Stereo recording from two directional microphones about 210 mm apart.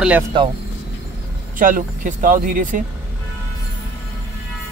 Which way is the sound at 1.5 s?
40° right (ahead or behind).